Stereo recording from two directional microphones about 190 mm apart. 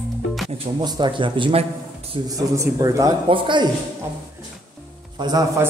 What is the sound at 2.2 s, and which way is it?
A man's voice, 15° right (ahead or behind).